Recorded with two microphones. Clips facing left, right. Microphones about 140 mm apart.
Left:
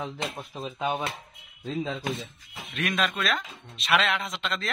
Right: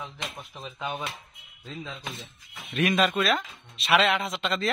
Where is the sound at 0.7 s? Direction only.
25° left (ahead or behind).